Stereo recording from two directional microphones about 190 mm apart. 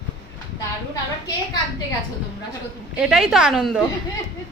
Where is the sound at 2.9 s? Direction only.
Centre (ahead or behind).